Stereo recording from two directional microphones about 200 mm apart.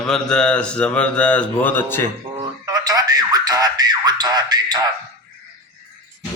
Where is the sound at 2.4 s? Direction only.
20° right (ahead or behind).